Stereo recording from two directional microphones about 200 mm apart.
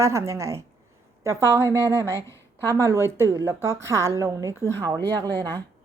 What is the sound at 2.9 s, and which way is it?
A woman's voice, 15° right (ahead or behind).